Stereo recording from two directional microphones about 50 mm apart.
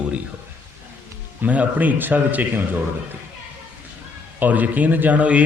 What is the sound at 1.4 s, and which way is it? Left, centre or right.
A man's voice, right.